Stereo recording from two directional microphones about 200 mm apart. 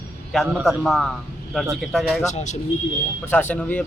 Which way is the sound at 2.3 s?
35° left (ahead or behind).